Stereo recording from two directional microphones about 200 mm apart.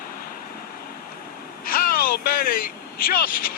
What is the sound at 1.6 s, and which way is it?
Vehicle, 45° left (ahead or behind).